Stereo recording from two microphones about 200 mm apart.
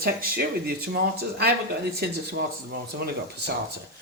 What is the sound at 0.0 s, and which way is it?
Speech, 50° right (ahead or behind).